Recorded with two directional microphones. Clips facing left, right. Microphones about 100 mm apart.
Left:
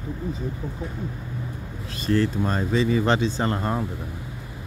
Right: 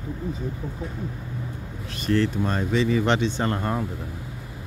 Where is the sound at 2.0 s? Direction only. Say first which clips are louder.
Even; 35° left (ahead or behind).